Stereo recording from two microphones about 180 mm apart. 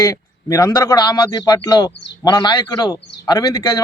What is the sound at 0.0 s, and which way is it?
A man's voice, 15° left (ahead or behind).